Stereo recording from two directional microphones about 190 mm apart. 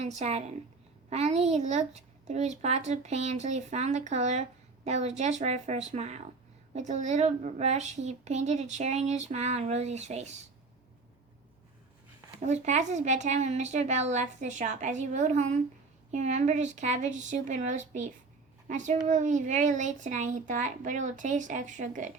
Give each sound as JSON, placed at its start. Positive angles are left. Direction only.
{"t": 0.0, "sound": "speech", "side_deg": -35}
{"t": 12.4, "sound": "speech", "side_deg": -35}